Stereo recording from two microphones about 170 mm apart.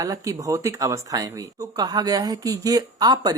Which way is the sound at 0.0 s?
20° right (ahead or behind).